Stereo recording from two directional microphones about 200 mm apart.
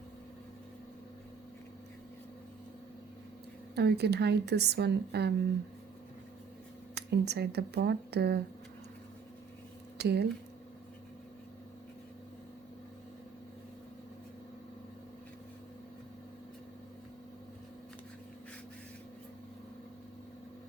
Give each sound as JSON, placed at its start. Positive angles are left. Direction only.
{"t": 3.8, "sound": "a woman's voice", "side_deg": -55}
{"t": 6.9, "sound": "a woman's voice", "side_deg": -55}
{"t": 10.0, "sound": "a woman's voice", "side_deg": -55}